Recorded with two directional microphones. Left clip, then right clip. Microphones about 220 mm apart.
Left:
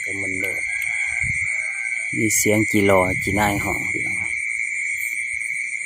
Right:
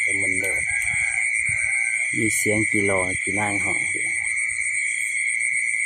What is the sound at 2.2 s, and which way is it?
Speech, 20° left (ahead or behind).